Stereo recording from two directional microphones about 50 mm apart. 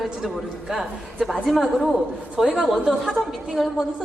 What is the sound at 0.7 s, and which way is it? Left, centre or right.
A woman's voice, centre.